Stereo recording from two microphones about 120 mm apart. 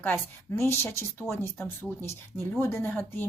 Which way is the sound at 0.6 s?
20° left (ahead or behind).